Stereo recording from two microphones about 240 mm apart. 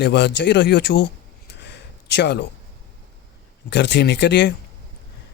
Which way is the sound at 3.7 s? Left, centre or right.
Left.